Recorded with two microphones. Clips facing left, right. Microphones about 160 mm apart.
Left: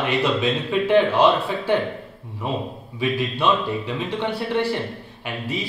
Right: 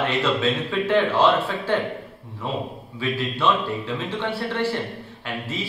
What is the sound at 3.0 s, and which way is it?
Speech, 15° left (ahead or behind).